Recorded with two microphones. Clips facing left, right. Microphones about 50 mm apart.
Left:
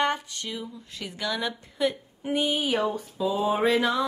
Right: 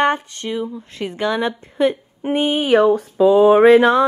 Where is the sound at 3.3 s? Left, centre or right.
Right.